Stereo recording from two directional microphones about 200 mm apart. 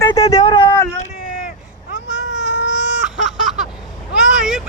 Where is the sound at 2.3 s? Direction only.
5° right (ahead or behind).